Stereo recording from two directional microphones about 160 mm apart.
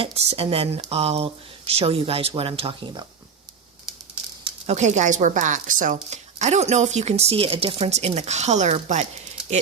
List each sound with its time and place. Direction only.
0.0 s speech: 40° right (ahead or behind)
4.4 s speech: 40° right (ahead or behind)